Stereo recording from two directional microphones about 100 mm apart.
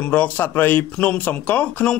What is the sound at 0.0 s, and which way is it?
A man's voice, 15° left (ahead or behind).